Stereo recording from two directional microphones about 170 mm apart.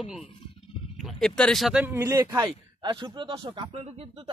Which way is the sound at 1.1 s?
5° left (ahead or behind).